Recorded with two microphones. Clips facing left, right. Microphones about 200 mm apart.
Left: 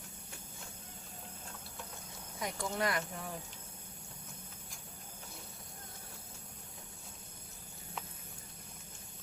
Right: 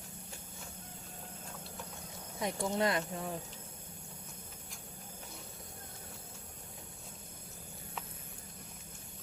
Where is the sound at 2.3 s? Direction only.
25° right (ahead or behind).